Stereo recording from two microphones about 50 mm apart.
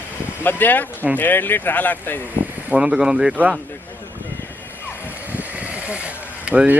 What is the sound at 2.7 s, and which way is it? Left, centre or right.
Speech, centre.